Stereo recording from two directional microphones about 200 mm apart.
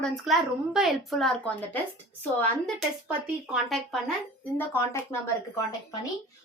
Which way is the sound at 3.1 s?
Centre (ahead or behind).